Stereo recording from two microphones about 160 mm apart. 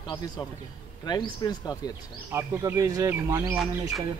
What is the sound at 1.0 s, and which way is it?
Speech, 25° left (ahead or behind).